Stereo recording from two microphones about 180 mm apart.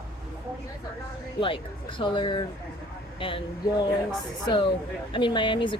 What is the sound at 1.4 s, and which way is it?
A woman's voice, 30° left (ahead or behind).